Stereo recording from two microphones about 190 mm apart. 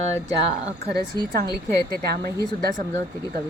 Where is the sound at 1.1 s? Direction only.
15° left (ahead or behind).